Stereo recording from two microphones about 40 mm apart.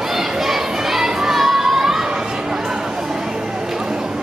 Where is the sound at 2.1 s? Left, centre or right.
Centre.